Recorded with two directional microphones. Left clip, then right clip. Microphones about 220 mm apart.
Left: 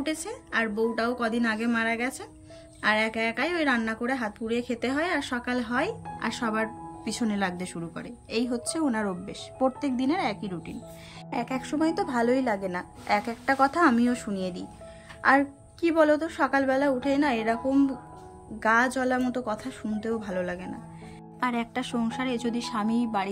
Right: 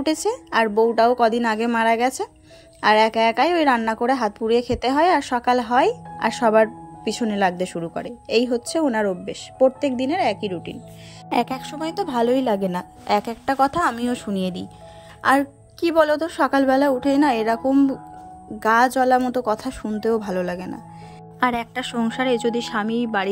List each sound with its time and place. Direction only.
0.0 s a woman's voice: 20° right (ahead or behind)
11.2 s a woman's voice: 30° right (ahead or behind); by 23.2 s 10° right (ahead or behind)